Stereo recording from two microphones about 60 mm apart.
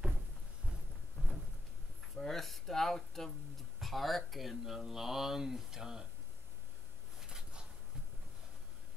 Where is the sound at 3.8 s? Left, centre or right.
Centre.